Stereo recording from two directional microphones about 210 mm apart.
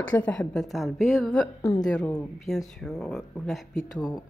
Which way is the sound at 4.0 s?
20° left (ahead or behind).